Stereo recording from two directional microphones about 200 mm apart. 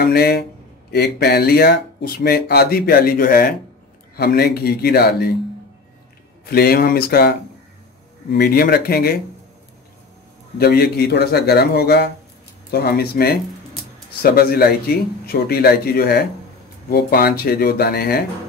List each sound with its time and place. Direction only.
0.0 s speech: 50° left (ahead or behind)
6.5 s speech: 50° left (ahead or behind)
10.6 s speech: 50° left (ahead or behind)